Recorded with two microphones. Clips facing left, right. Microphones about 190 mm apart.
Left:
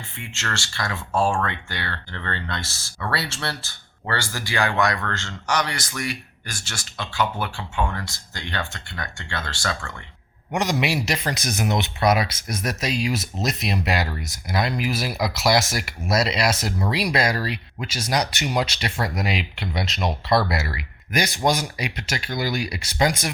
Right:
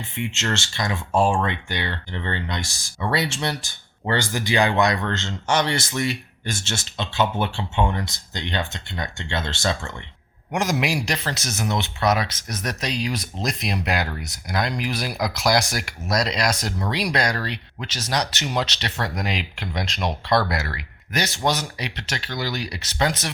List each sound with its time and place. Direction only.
0.2 s speech: 20° right (ahead or behind)
10.5 s a man's voice: centre (ahead or behind)
11.2 s speech: 15° left (ahead or behind)